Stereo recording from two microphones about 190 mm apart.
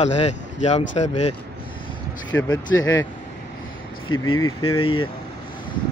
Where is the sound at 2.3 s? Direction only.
15° left (ahead or behind).